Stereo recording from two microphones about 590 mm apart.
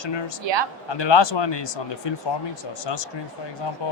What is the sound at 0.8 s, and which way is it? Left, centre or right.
Speech, left.